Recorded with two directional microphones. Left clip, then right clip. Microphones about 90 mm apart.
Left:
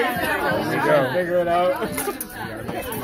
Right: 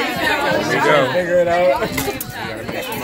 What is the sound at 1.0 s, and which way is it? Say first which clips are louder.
Speech: right 5 dB; 55° right (ahead or behind).